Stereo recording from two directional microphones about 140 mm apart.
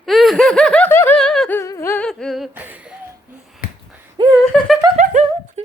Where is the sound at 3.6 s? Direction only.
85° left.